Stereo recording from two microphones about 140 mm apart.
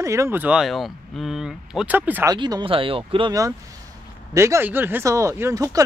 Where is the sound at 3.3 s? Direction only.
25° right (ahead or behind).